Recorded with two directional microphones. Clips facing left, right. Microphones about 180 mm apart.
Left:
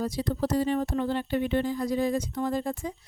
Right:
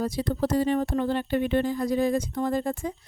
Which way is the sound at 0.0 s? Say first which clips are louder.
Right 2 dB; 55° right (ahead or behind).